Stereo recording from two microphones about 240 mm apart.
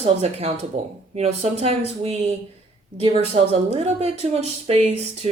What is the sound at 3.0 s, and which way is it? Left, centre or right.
Speech, right.